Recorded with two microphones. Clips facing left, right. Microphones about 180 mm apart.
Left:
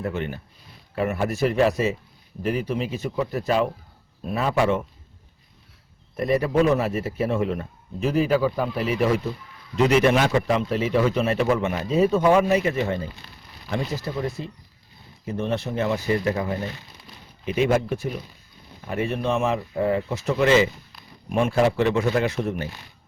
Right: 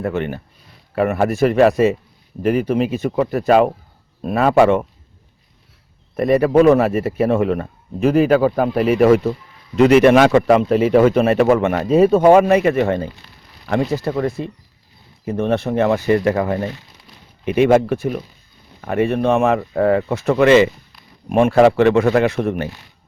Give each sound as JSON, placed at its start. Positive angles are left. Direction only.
{"t": 0.0, "sound": "a man's voice", "side_deg": -65}
{"t": 6.1, "sound": "a man's voice", "side_deg": -60}